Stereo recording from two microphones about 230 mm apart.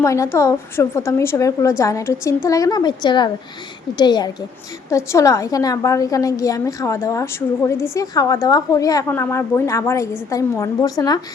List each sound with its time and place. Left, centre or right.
0.0 s a woman's voice: centre